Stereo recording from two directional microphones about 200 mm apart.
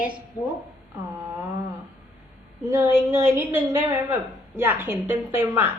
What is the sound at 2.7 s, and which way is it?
A man's voice, 10° right (ahead or behind).